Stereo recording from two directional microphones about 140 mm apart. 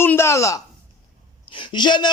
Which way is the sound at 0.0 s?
15° left (ahead or behind).